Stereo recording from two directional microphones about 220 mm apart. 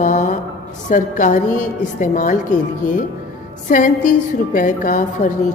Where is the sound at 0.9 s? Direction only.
35° left (ahead or behind).